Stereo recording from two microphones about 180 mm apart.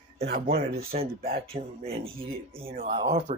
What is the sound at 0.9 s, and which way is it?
Speech, 40° right (ahead or behind).